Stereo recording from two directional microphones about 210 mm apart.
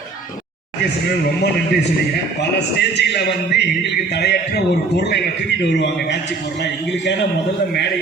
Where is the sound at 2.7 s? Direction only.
55° left (ahead or behind).